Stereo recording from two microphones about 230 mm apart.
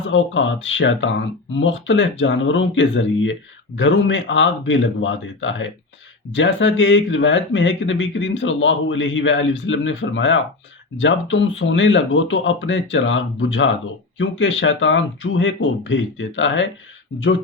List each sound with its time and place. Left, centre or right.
0.1 s speech: left